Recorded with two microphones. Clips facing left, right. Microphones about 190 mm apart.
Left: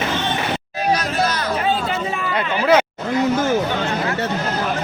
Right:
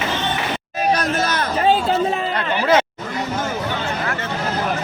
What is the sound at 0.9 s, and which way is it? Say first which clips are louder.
Music: right 1 dB; 55° right (ahead or behind).